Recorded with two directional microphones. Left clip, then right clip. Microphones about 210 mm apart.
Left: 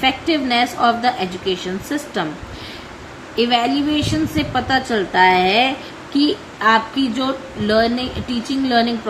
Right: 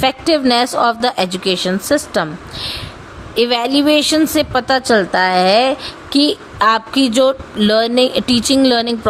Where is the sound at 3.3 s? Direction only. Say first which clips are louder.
Right 3 dB; 50° right (ahead or behind).